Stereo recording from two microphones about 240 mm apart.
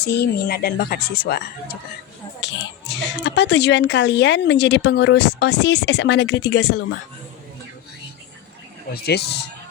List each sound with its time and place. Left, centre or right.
0.0 s speech: left
2.4 s music: left
3.2 s speech: left
8.9 s speech: left